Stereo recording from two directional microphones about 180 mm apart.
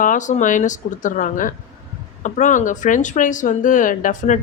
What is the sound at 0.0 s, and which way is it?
Speech, 45° left (ahead or behind).